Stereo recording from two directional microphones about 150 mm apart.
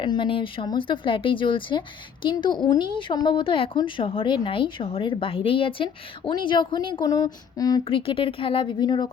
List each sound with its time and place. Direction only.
0.0 s a woman's voice: 35° left (ahead or behind)
7.9 s a woman's voice: 35° left (ahead or behind)